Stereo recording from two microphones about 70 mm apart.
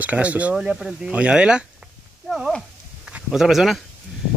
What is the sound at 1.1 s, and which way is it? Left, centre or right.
Speech, centre.